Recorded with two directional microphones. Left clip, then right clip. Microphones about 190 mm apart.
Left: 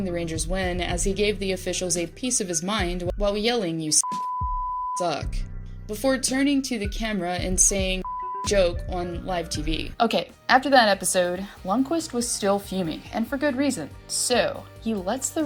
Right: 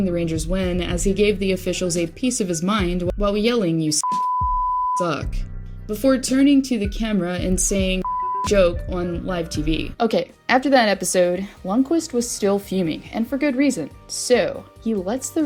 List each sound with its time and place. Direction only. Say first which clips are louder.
0.0 s speech: right 5 dB; centre (ahead or behind)
10.0 s speech: right 1 dB; 50° right (ahead or behind)